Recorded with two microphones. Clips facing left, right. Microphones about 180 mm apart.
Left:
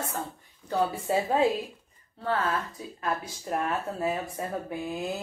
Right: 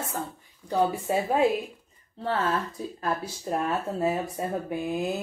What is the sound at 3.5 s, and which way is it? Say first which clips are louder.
Speech: right 2 dB; 25° right (ahead or behind).